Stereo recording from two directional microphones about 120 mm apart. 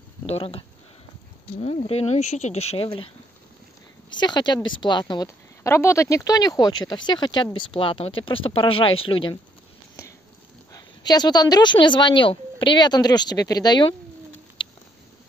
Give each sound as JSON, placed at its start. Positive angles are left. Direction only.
{"t": 0.3, "sound": "speech", "side_deg": 50}
{"t": 4.2, "sound": "a woman's voice", "side_deg": 35}
{"t": 5.6, "sound": "a woman's voice", "side_deg": 25}
{"t": 10.7, "sound": "a woman's voice", "side_deg": 35}
{"t": 14.6, "sound": "a sound", "side_deg": 45}